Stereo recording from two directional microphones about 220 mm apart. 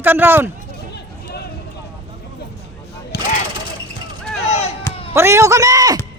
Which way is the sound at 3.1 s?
45° left (ahead or behind).